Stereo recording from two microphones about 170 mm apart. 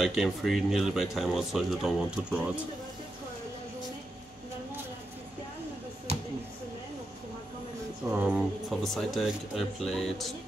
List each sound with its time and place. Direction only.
0.0 s speech: centre (ahead or behind)
6.1 s a sound: 35° right (ahead or behind)
8.1 s speech: 10° right (ahead or behind)